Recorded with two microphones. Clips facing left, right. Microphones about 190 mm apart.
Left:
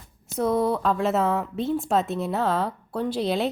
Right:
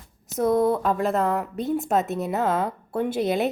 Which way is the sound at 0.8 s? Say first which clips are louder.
Even; centre (ahead or behind).